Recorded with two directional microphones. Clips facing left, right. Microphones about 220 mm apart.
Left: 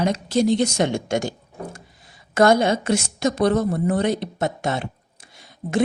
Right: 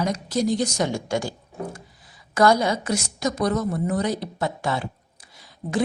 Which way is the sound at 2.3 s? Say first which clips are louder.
Left 3 dB; 25° left (ahead or behind).